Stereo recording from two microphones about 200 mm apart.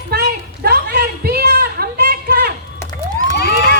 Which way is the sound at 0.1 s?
50° right (ahead or behind).